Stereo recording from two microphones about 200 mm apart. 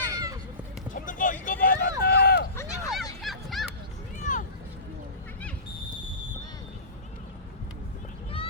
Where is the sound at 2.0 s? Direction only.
50° left (ahead or behind).